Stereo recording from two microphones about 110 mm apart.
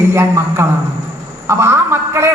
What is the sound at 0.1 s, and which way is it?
A woman's voice, 25° right (ahead or behind).